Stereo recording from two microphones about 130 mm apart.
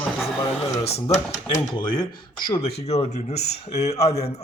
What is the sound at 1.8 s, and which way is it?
Speech, 40° left (ahead or behind).